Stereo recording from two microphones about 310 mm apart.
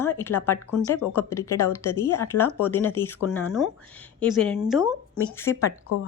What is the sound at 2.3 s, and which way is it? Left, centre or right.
Speech, left.